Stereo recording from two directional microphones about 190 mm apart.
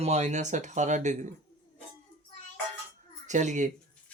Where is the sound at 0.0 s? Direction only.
35° right (ahead or behind).